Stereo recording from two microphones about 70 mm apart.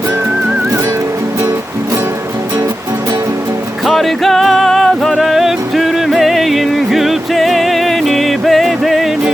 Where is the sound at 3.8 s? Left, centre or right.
Centre.